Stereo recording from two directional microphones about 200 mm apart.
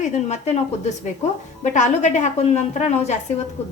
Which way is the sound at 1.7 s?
35° left (ahead or behind).